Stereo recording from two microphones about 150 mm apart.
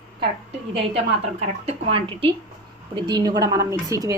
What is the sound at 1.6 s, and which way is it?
A woman's voice, 35° right (ahead or behind).